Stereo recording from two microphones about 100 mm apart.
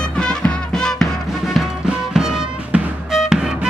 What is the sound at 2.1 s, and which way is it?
Music, 5° right (ahead or behind).